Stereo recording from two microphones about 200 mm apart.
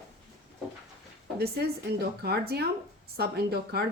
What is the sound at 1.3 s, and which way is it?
A woman's voice, 50° right (ahead or behind).